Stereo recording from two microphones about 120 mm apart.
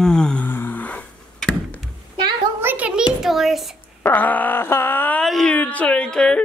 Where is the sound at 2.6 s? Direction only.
15° right (ahead or behind).